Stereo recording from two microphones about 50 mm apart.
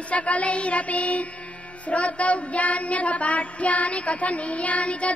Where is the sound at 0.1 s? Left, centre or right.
Left.